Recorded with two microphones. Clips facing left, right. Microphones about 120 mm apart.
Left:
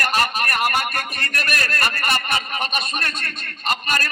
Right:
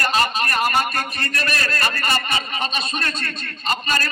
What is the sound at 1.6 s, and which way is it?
A man's voice, 55° left (ahead or behind).